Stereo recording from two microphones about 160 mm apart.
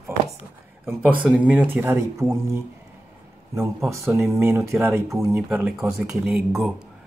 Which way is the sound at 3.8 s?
20° right (ahead or behind).